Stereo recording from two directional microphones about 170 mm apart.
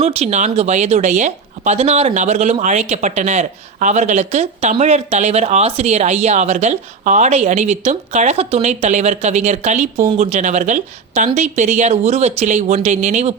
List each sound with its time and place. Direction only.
0.0 s speech: 40° right (ahead or behind)